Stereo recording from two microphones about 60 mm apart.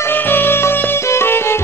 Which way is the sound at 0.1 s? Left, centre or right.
Left.